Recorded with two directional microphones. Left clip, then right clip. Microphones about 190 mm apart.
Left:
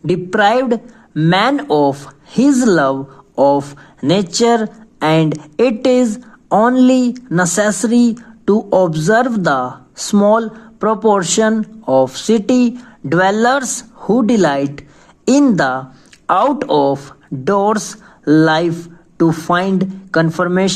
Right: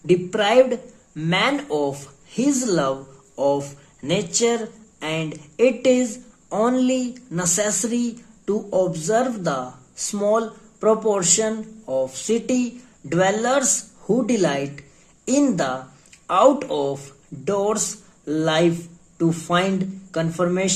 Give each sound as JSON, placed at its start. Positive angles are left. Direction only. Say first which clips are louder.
{"t": 0.0, "sound": "speech", "louder": "left 6 dB", "side_deg": 35}
{"t": 6.5, "sound": "speech", "louder": "left 9 dB", "side_deg": 25}
{"t": 6.7, "sound": "speech", "louder": "left 9 dB", "side_deg": 35}